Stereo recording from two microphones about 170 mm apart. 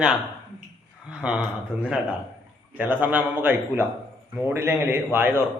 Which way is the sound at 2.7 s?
10° right (ahead or behind).